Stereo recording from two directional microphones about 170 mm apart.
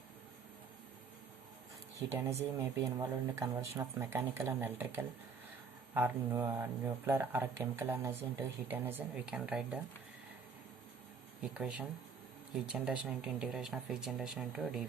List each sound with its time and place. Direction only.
2.0 s speech: 15° right (ahead or behind)
11.3 s speech: 5° right (ahead or behind)